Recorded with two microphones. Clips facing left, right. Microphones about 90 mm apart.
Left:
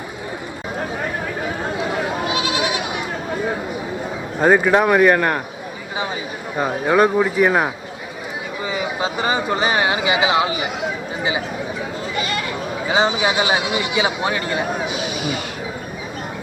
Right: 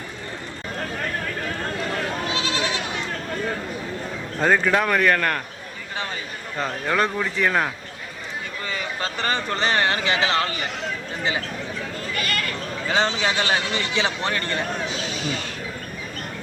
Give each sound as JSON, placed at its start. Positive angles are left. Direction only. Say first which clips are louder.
{"t": 0.8, "sound": "bleat", "louder": "left 3 dB", "side_deg": 15}
{"t": 4.4, "sound": "speech", "louder": "left 5 dB", "side_deg": 15}
{"t": 6.6, "sound": "speech", "louder": "left 7 dB", "side_deg": 15}